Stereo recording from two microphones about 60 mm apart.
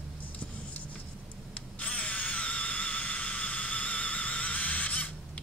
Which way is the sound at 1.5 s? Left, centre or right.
Left.